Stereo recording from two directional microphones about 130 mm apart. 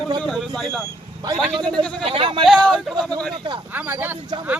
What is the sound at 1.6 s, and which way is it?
Speech, 35° right (ahead or behind).